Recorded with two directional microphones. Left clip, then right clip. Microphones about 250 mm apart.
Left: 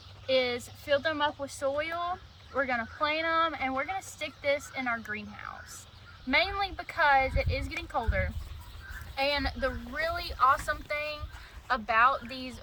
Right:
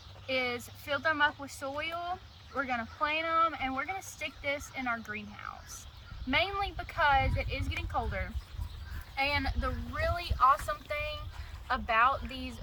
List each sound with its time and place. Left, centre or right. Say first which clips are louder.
0.3 s speech: left 5 dB; centre